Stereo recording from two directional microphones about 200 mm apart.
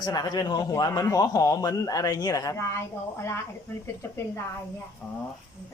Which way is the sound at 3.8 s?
10° left (ahead or behind).